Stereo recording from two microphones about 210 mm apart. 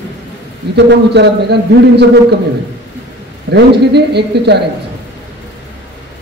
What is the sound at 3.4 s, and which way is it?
A man's voice, 55° right (ahead or behind).